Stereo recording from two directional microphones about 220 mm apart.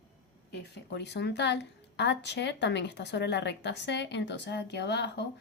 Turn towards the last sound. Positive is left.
turn(degrees=50)  # may be behind; listen again after turning